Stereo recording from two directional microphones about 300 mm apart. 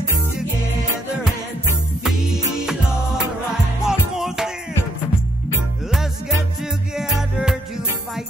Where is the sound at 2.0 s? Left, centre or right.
Centre.